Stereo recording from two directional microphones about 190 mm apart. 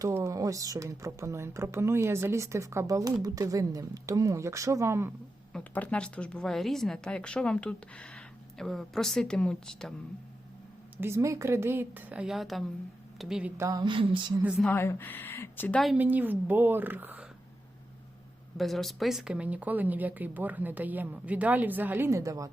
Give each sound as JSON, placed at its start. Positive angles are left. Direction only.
{"t": 0.0, "sound": "speech", "side_deg": -15}
{"t": 5.5, "sound": "speech", "side_deg": 5}
{"t": 10.9, "sound": "speech", "side_deg": -15}
{"t": 13.6, "sound": "a sound", "side_deg": -20}
{"t": 14.7, "sound": "speech", "side_deg": 10}
{"t": 18.5, "sound": "speech", "side_deg": 0}